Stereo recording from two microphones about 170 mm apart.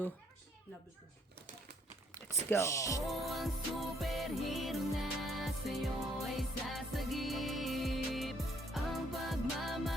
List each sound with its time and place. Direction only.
2.5 s speech: 15° left (ahead or behind)
3.1 s music: centre (ahead or behind)